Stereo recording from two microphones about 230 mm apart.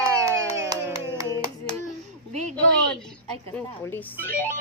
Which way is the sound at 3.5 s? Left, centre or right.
Centre.